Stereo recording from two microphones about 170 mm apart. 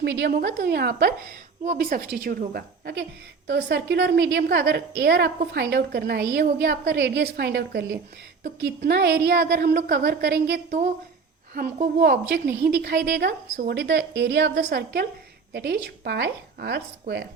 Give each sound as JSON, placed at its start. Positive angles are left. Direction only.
{"t": 0.0, "sound": "a woman's voice", "side_deg": -85}
{"t": 11.5, "sound": "a woman's voice", "side_deg": -55}